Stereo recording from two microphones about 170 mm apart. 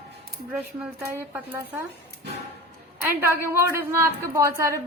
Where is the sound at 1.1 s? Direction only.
10° right (ahead or behind).